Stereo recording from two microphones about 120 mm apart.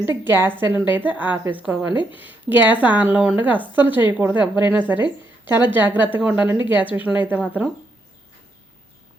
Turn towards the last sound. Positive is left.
turn(degrees=-10)  # may be behind; listen again after turning